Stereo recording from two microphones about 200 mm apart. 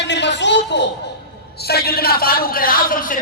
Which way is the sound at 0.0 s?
60° left (ahead or behind).